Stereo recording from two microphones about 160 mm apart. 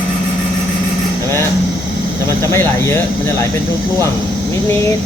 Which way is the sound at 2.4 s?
15° left (ahead or behind).